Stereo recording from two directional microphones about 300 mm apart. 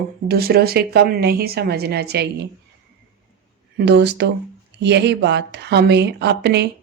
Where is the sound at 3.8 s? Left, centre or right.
Right.